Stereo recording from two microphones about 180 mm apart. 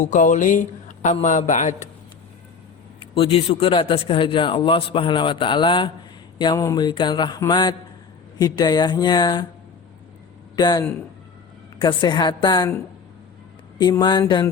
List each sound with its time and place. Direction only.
0.0 s a man's voice: 45° left (ahead or behind)
3.0 s a man's voice: 30° left (ahead or behind)
10.5 s a man's voice: 20° left (ahead or behind)
13.7 s a man's voice: 25° left (ahead or behind)